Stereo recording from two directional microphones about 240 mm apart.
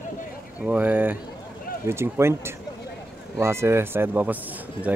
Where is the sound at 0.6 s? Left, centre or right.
Centre.